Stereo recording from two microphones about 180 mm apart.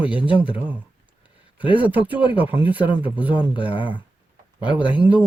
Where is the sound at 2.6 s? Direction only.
10° right (ahead or behind).